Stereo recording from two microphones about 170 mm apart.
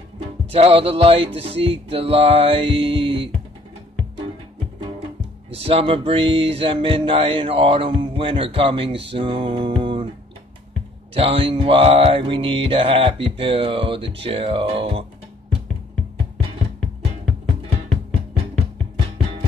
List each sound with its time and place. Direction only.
0.5 s music: 35° right (ahead or behind)
5.5 s music: 35° right (ahead or behind)
11.1 s music: 35° right (ahead or behind)